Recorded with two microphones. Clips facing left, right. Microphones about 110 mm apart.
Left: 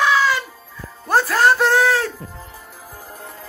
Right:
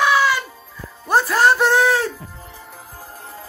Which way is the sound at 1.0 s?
5° right (ahead or behind).